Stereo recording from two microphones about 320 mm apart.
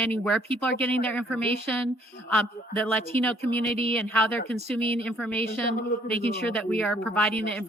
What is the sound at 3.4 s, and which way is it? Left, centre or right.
Speech, left.